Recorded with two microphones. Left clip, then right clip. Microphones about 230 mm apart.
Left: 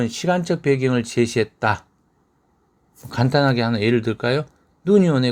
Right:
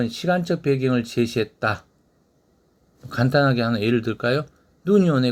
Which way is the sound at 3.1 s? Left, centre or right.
Left.